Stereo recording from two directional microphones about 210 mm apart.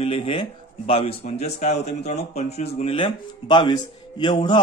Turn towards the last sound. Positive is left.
turn(degrees=20)  # may be behind; listen again after turning